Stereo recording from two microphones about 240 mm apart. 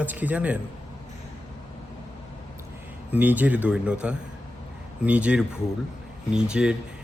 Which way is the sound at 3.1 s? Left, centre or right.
Centre.